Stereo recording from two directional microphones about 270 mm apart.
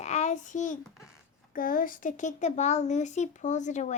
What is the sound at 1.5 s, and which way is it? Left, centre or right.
Speech, left.